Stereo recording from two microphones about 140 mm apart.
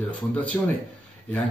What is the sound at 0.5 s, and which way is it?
Speech, 20° left (ahead or behind).